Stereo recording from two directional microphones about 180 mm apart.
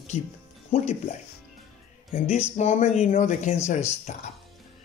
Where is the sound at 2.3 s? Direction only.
35° left (ahead or behind).